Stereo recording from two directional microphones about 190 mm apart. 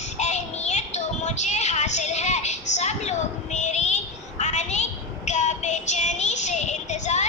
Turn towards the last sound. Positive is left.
turn(degrees=40)  # may be behind; listen again after turning